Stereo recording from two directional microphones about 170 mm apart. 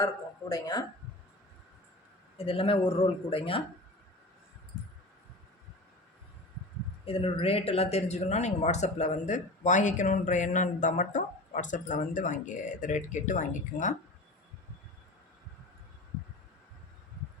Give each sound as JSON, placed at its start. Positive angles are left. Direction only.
{"t": 0.0, "sound": "speech", "side_deg": 20}
{"t": 2.5, "sound": "speech", "side_deg": 35}
{"t": 7.0, "sound": "speech", "side_deg": 35}